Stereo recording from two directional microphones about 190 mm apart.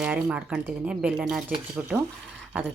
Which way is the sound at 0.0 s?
5° right (ahead or behind).